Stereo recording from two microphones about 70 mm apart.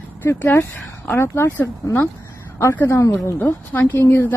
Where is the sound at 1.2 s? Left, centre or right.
Left.